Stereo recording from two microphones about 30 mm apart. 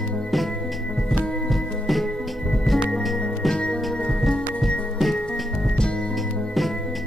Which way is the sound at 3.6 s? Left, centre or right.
Left.